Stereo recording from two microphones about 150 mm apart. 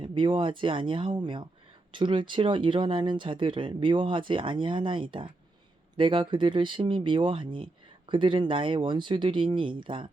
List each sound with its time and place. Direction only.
0.0 s speech: 35° right (ahead or behind)